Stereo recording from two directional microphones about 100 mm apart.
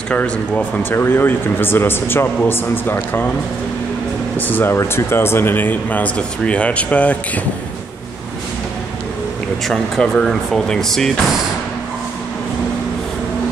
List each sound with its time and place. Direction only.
0.1 s speech: 15° left (ahead or behind)
4.4 s speech: 20° left (ahead or behind)
9.7 s speech: 5° left (ahead or behind)